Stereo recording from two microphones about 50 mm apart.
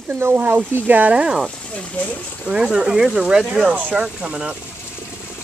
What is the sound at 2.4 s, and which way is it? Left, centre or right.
Speech, centre.